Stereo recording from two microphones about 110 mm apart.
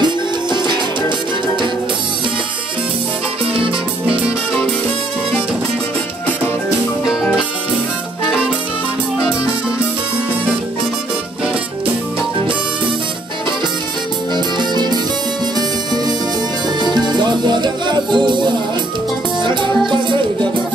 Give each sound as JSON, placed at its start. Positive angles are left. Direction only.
{"t": 0.0, "sound": "music", "side_deg": -45}
{"t": 3.5, "sound": "music", "side_deg": -55}
{"t": 14.3, "sound": "music", "side_deg": -40}
{"t": 17.2, "sound": "music", "side_deg": -45}